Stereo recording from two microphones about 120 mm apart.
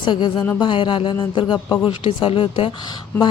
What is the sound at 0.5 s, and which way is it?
Speech, 45° left (ahead or behind).